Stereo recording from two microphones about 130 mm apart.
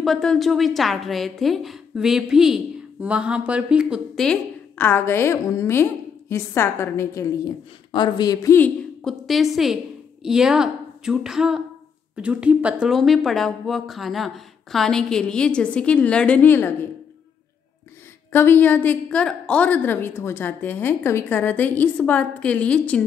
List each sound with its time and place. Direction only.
0.0 s speech: 5° left (ahead or behind)
4.7 s a woman's voice: 15° left (ahead or behind)
7.9 s a woman's voice: 35° left (ahead or behind)
8.5 s a sound: 10° left (ahead or behind)
9.2 s speech: centre (ahead or behind); by 16.7 s 15° left (ahead or behind)
18.3 s a woman's voice: 15° left (ahead or behind)